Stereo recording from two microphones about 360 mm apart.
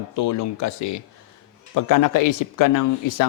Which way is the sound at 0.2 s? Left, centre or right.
Left.